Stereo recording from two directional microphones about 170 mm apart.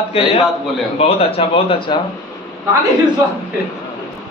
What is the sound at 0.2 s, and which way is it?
A man's voice, 35° left (ahead or behind).